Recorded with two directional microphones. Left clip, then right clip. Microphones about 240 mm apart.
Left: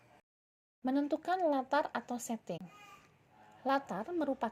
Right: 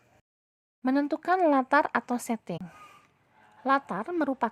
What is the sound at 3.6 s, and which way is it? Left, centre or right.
Speech, centre.